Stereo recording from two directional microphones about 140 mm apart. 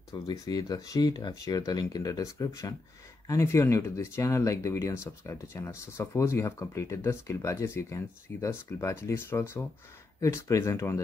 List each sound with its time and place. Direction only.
0.1 s speech: 25° left (ahead or behind)